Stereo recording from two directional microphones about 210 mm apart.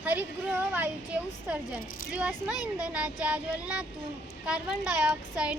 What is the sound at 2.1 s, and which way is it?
A child's voice, 5° right (ahead or behind).